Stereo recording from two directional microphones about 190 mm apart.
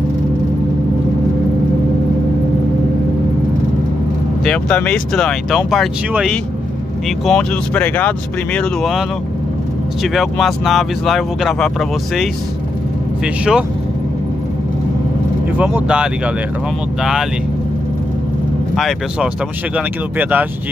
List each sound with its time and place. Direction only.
4.5 s speech: 5° left (ahead or behind)
10.0 s speech: centre (ahead or behind)
13.2 s speech: 5° right (ahead or behind)
15.5 s speech: 5° right (ahead or behind)
18.8 s speech: centre (ahead or behind)